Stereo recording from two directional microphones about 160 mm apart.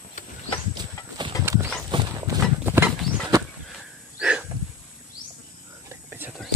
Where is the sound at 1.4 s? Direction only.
15° right (ahead or behind).